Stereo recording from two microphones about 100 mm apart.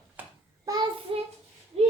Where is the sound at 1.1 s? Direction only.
65° right (ahead or behind).